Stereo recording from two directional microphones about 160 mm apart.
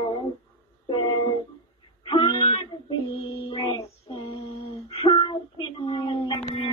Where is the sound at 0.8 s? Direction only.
30° left (ahead or behind).